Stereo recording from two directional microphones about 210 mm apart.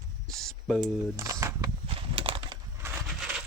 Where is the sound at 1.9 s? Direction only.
25° right (ahead or behind).